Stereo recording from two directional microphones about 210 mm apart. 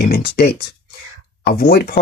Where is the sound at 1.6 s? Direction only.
45° left (ahead or behind).